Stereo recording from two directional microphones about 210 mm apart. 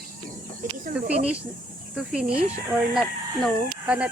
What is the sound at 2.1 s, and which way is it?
Speech, 5° right (ahead or behind).